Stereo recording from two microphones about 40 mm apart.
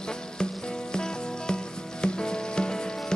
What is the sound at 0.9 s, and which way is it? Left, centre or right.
Music, centre.